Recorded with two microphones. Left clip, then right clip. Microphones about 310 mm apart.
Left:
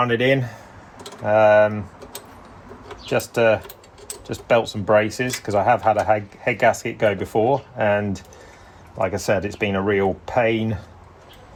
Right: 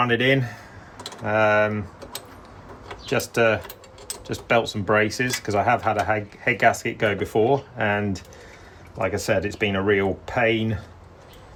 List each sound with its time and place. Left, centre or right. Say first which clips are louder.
0.0 s speech: left 1 dB; centre
3.1 s speech: left 3 dB; centre